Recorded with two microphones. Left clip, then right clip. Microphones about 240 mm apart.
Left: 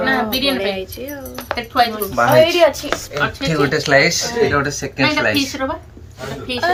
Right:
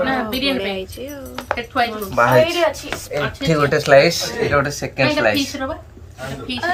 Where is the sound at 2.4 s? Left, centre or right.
Left.